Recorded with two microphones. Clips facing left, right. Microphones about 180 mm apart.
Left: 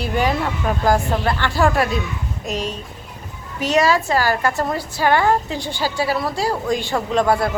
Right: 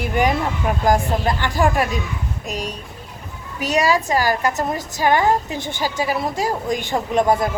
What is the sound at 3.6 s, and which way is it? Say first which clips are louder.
A woman's voice: left 1 dB; 15° right (ahead or behind).